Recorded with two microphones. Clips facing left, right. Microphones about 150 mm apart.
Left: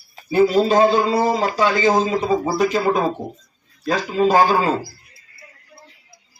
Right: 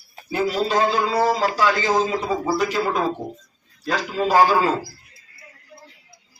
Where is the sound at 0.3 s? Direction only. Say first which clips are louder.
Left 7 dB; 30° left (ahead or behind).